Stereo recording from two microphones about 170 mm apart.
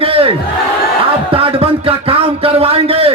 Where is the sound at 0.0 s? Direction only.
35° right (ahead or behind).